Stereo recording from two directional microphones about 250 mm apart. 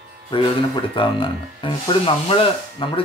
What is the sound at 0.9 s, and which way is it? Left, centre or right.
Speech, centre.